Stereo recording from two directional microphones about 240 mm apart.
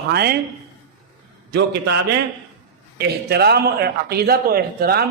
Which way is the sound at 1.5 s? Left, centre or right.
Right.